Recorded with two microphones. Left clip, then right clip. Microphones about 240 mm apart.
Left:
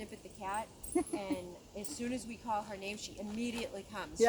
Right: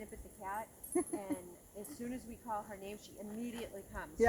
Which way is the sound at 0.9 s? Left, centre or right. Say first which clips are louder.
Left 2 dB; right.